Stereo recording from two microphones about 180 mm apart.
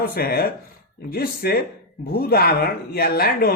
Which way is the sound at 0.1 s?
55° left (ahead or behind).